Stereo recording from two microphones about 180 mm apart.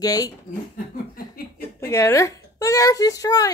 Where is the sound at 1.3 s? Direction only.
55° left (ahead or behind).